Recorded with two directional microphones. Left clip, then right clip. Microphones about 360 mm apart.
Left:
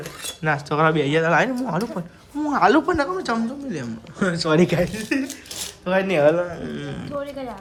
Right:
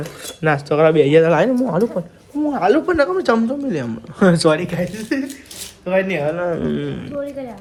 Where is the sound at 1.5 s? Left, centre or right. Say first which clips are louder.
Right 7 dB; right.